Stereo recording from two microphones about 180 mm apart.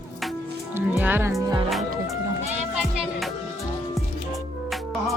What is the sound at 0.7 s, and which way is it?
Music, 10° right (ahead or behind).